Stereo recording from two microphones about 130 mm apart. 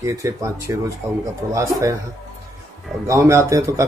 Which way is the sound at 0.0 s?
25° right (ahead or behind).